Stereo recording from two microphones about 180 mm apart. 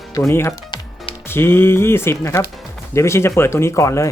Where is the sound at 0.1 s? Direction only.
15° left (ahead or behind).